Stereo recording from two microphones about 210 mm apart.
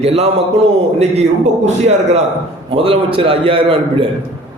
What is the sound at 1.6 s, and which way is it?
A man's voice, 30° right (ahead or behind).